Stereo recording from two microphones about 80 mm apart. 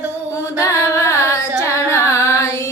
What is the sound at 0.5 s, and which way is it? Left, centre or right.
Carnatic music, left.